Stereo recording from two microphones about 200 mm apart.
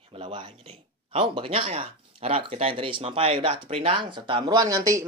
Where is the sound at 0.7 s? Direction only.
25° right (ahead or behind).